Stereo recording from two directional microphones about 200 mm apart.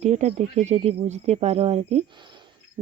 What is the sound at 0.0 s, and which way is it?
Speech, 35° right (ahead or behind).